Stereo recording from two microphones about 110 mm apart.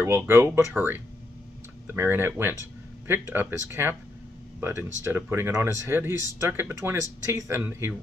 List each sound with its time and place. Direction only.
0.0 s speech: 20° right (ahead or behind)